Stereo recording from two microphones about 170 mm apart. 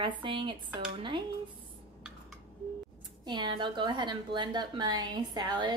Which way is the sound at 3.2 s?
25° right (ahead or behind).